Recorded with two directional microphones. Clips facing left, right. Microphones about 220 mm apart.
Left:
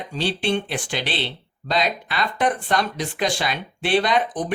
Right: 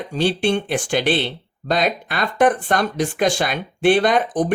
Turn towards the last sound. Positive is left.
turn(degrees=-45)  # may be behind; listen again after turning